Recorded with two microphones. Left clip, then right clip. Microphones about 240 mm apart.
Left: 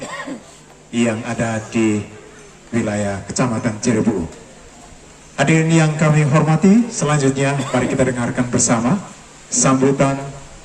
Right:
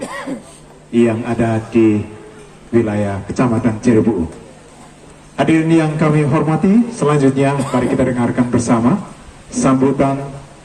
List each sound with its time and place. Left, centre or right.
0.0 s throat clearing: right
0.9 s a man's voice: left
5.4 s a man's voice: left